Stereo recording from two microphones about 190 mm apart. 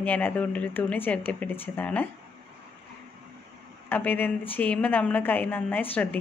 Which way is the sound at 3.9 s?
10° left (ahead or behind).